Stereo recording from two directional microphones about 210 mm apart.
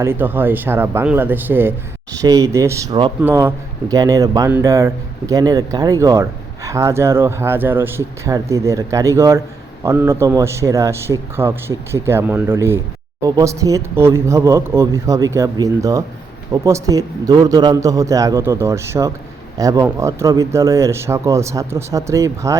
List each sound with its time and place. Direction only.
0.0 s speech: 10° right (ahead or behind)